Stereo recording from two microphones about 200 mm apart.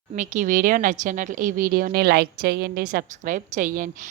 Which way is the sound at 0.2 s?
40° right (ahead or behind).